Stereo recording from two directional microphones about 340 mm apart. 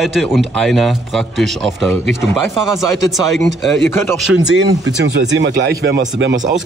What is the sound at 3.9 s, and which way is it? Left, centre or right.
Speech, centre.